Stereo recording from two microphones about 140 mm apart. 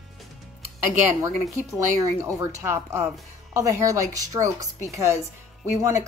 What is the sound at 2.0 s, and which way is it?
Speech, 20° right (ahead or behind).